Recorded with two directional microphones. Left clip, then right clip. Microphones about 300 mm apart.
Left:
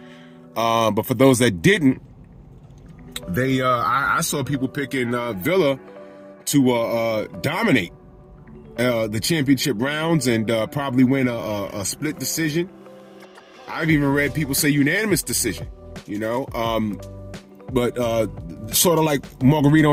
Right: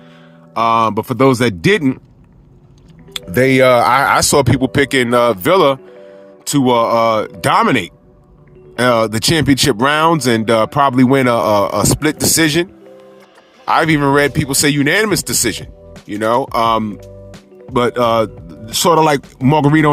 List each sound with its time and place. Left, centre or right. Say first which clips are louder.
0.5 s speech: right 6 dB; right
3.1 s speech: right 10 dB; right
13.7 s speech: right 9 dB; right